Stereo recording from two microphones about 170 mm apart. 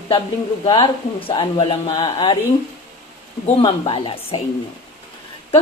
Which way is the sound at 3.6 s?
30° left (ahead or behind).